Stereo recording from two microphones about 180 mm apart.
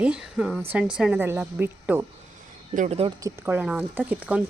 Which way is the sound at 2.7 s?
40° right (ahead or behind).